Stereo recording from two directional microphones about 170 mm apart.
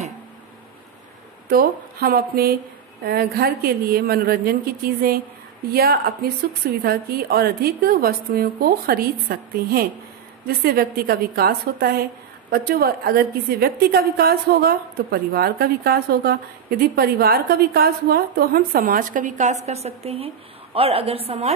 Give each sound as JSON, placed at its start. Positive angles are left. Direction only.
{"t": 1.5, "sound": "a woman's voice", "side_deg": -60}